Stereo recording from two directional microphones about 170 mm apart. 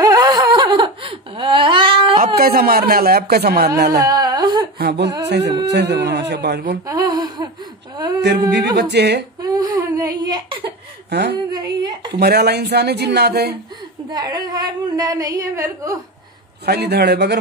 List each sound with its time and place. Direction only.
0.0 s a sound: 20° right (ahead or behind)
2.1 s a man's voice: 60° right (ahead or behind)
4.0 s a sound: 25° right (ahead or behind)
4.7 s speech: 80° right
6.9 s a sound: 20° right (ahead or behind)
8.5 s singing: 90° right
9.4 s a sound: 20° right (ahead or behind)
11.1 s a woman's voice: 80° right
11.5 s a woman's voice: 25° right (ahead or behind)
12.2 s speech: 70° right (ahead or behind)
14.1 s a woman's voice: 20° right (ahead or behind)
16.6 s speech: 75° right (ahead or behind)